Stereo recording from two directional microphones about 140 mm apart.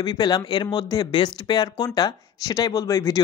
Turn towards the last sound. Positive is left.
turn(degrees=20)  # may be behind; listen again after turning